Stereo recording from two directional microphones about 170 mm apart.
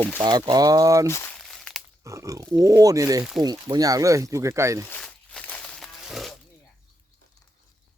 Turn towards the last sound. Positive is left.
turn(degrees=0)  # may be behind; listen again after turning